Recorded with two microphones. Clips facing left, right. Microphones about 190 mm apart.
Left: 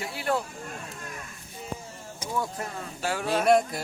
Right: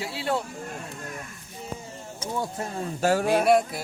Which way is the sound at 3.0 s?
45° right (ahead or behind).